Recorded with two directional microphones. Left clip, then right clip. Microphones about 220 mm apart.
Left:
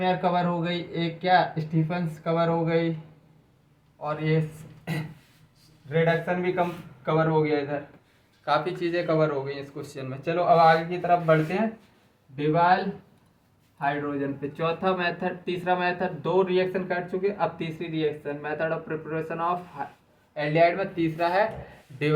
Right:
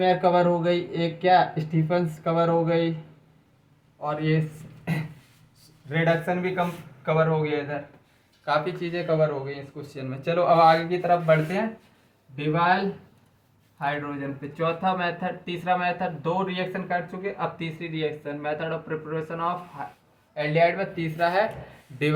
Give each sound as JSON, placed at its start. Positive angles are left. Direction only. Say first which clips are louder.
{"t": 0.0, "sound": "speech", "louder": "right 4 dB", "side_deg": -10}
{"t": 4.0, "sound": "speech", "louder": "right 1 dB", "side_deg": -5}
{"t": 4.9, "sound": "a sound", "louder": "right 2 dB", "side_deg": 0}
{"t": 5.9, "sound": "speech", "louder": "even", "side_deg": 0}
{"t": 13.7, "sound": "speech", "louder": "left 1 dB", "side_deg": 10}